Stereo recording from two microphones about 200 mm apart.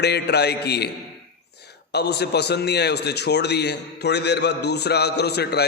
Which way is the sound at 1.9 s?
55° left (ahead or behind).